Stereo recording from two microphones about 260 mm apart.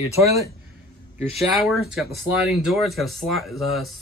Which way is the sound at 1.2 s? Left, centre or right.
Centre.